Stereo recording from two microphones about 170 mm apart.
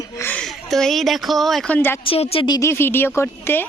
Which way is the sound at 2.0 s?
35° left (ahead or behind).